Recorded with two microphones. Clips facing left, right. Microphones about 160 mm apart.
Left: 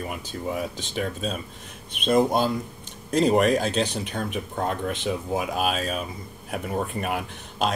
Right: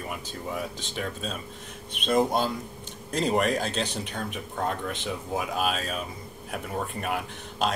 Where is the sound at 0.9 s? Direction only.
15° left (ahead or behind).